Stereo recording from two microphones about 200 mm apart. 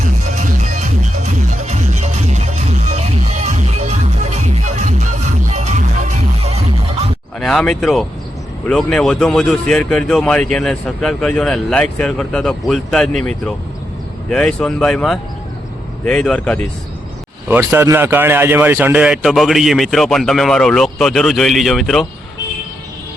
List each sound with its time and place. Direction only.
0.0 s music: 40° right (ahead or behind)
7.3 s speech: centre (ahead or behind)
17.5 s speech: 10° right (ahead or behind)